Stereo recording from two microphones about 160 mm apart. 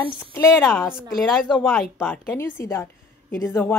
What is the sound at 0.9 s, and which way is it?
Speech, 5° right (ahead or behind).